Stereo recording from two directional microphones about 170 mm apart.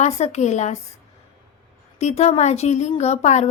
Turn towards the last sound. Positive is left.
turn(degrees=40)  # may be behind; listen again after turning